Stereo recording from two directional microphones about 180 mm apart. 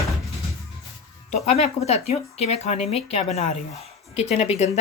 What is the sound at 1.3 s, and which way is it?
Speech, 35° left (ahead or behind).